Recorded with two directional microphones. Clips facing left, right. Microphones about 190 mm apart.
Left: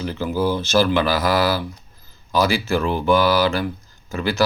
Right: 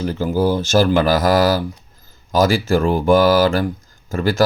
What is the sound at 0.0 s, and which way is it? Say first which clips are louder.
Speech: right 4 dB; 40° right (ahead or behind).